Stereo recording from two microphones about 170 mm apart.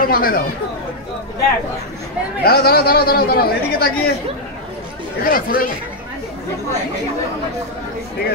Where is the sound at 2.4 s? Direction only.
65° left (ahead or behind).